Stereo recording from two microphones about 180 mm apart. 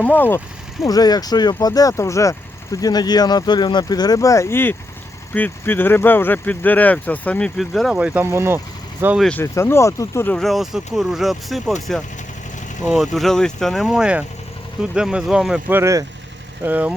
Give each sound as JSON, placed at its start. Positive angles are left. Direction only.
{"t": 0.0, "sound": "speech", "side_deg": 10}
{"t": 9.2, "sound": "speech", "side_deg": 10}
{"t": 15.8, "sound": "speech", "side_deg": -15}